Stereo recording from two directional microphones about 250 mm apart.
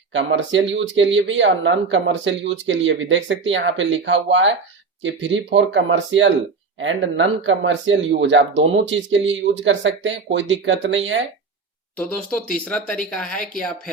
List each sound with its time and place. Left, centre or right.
0.1 s speech: right
12.1 s speech: centre